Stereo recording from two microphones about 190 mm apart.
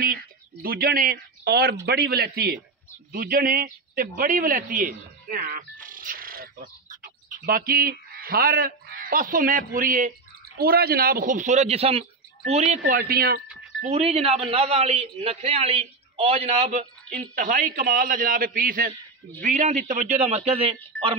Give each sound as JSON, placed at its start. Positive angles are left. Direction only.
{"t": 0.0, "sound": "a man's voice", "side_deg": -50}
{"t": 13.7, "sound": "a man's voice", "side_deg": -35}